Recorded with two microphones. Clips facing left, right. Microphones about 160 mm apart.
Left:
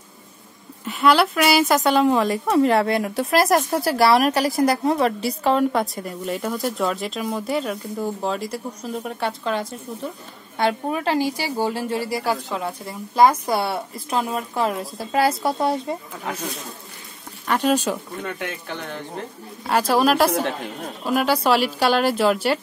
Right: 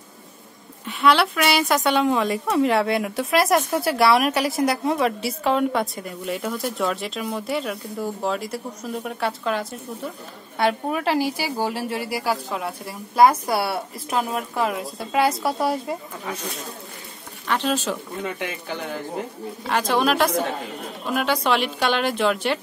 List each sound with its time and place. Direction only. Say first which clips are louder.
0.8 s a woman's voice: left 1 dB; centre (ahead or behind)
17.6 s speech: left 4 dB; 10° left (ahead or behind)
18.2 s a woman's voice: right 1 dB; centre (ahead or behind)